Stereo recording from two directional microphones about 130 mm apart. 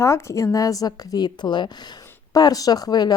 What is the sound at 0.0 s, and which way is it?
A woman's voice, 25° left (ahead or behind).